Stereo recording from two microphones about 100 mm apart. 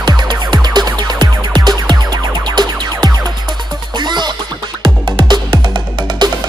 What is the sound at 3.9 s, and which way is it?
Music, 45° right (ahead or behind).